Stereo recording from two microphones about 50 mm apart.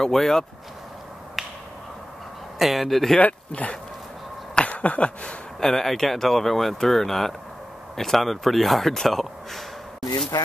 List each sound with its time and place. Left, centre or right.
0.0 s speech: centre
2.6 s speech: centre
3.2 s speech: left
4.6 s a sound: left
5.6 s speech: centre